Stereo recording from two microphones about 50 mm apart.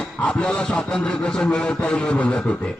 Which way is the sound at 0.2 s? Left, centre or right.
Left.